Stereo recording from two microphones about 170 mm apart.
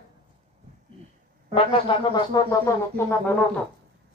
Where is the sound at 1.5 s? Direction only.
30° left (ahead or behind); by 3.4 s 15° left (ahead or behind).